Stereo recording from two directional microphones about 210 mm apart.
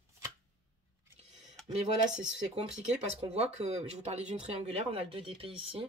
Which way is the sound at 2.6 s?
30° right (ahead or behind).